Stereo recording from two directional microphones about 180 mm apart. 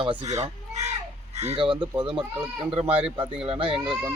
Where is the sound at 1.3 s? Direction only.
35° right (ahead or behind).